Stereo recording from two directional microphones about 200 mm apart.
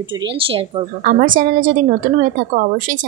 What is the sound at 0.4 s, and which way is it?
Speech, 25° right (ahead or behind).